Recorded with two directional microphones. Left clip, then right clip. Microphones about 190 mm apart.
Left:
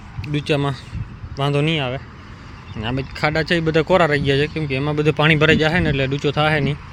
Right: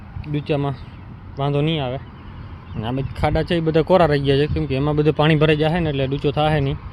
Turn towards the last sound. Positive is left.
turn(degrees=-5)  # may be behind; listen again after turning